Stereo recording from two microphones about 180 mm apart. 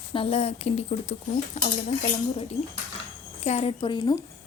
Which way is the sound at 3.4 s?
35° left (ahead or behind).